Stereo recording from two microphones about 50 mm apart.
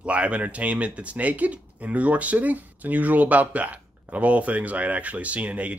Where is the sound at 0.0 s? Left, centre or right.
Right.